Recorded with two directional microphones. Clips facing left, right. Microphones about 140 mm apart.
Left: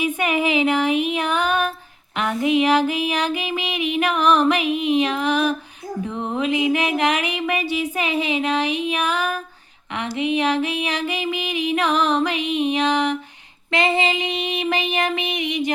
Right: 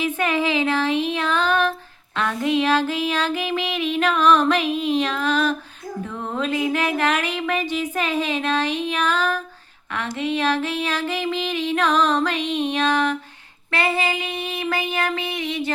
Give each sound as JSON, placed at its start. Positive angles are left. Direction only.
{"t": 0.0, "sound": "female singing", "side_deg": 15}